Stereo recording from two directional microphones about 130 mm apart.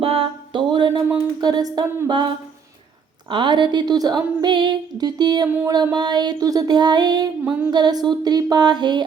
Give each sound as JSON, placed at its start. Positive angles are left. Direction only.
{"t": 0.0, "sound": "a sound", "side_deg": -45}
{"t": 1.4, "sound": "female singing", "side_deg": -30}
{"t": 7.4, "sound": "music", "side_deg": -10}
{"t": 7.7, "sound": "female singing", "side_deg": -35}